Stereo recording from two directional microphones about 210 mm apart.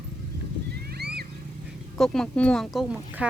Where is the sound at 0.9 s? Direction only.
50° right (ahead or behind).